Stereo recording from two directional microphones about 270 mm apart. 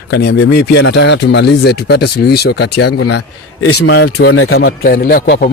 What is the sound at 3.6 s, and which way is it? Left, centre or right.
Speech, left.